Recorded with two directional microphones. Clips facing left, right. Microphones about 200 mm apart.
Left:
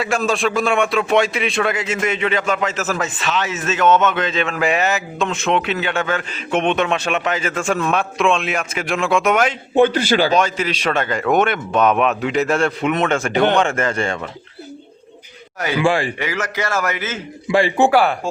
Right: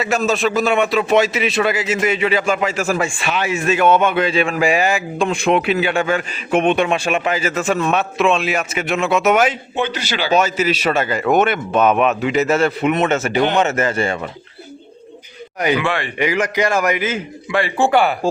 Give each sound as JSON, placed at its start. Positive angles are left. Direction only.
{"t": 0.0, "sound": "a man's voice", "side_deg": 0}
{"t": 9.7, "sound": "a man's voice", "side_deg": 50}
{"t": 10.3, "sound": "a man's voice", "side_deg": -5}
{"t": 15.8, "sound": "speech", "side_deg": 30}
{"t": 16.1, "sound": "a man's voice", "side_deg": -15}
{"t": 17.5, "sound": "speech", "side_deg": 25}
{"t": 17.9, "sound": "speech", "side_deg": 0}